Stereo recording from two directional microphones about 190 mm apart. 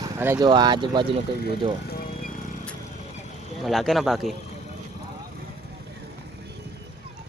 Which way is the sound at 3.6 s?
Centre (ahead or behind).